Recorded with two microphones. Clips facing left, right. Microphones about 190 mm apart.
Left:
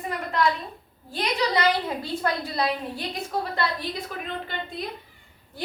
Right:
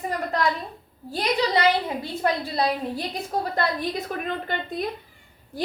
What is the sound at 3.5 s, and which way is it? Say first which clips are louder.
A woman's voice: right 3 dB; 50° right (ahead or behind).